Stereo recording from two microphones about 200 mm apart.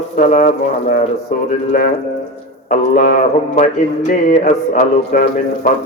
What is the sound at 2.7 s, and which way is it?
A man's voice, 40° left (ahead or behind).